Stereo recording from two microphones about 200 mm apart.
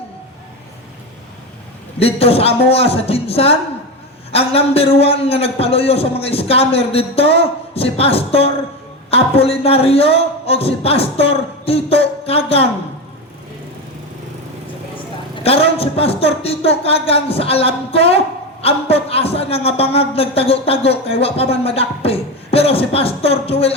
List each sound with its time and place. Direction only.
2.0 s a man's voice: 30° left (ahead or behind)
15.4 s a man's voice: 30° left (ahead or behind)